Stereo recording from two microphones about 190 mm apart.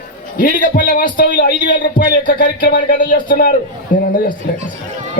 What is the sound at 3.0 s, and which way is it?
Speech, 45° left (ahead or behind).